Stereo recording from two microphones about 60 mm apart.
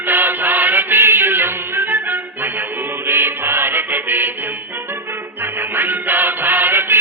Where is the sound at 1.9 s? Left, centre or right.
Right.